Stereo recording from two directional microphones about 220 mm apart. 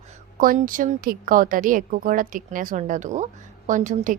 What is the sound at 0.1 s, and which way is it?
A woman's voice, 40° right (ahead or behind).